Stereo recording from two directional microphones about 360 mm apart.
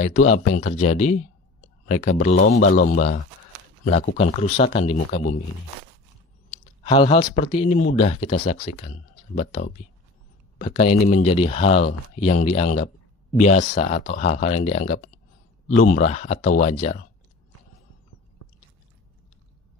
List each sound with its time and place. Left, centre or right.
0.0 s speech: centre
6.5 s speech: centre